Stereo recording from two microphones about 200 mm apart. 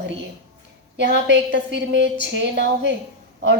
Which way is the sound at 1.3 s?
60° right (ahead or behind).